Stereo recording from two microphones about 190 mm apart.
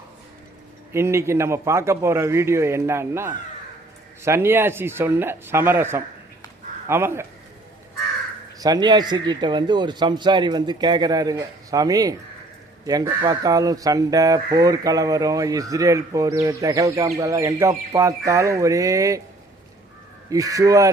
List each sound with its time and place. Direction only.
0.9 s speech: 15° right (ahead or behind)
8.5 s speech: 20° right (ahead or behind)
20.3 s speech: 20° right (ahead or behind)